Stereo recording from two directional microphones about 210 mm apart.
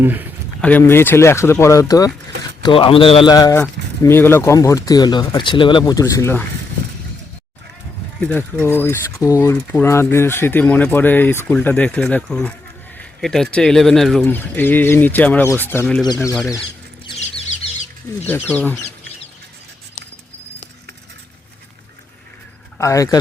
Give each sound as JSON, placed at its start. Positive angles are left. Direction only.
{"t": 0.0, "sound": "speech", "side_deg": -10}
{"t": 0.6, "sound": "a man's voice", "side_deg": 10}
{"t": 8.2, "sound": "speech", "side_deg": 5}
{"t": 17.1, "sound": "chicken", "side_deg": 30}
{"t": 18.3, "sound": "speech", "side_deg": 10}
{"t": 22.8, "sound": "speech", "side_deg": 15}